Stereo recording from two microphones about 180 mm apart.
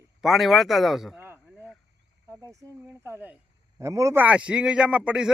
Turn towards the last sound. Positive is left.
turn(degrees=-5)  # may be behind; listen again after turning